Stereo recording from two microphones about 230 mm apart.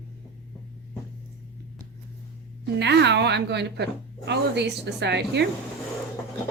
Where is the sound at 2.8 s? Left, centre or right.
Right.